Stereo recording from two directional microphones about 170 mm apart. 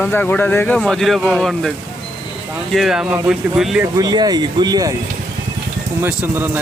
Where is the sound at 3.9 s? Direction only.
25° right (ahead or behind).